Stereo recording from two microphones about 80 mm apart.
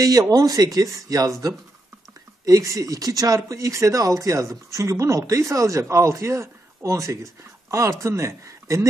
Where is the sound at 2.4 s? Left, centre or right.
Right.